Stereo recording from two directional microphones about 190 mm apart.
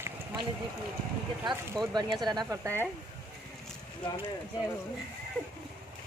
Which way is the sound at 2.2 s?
20° right (ahead or behind).